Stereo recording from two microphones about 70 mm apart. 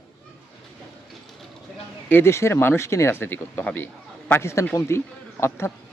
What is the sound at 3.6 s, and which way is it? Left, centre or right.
Speech, left.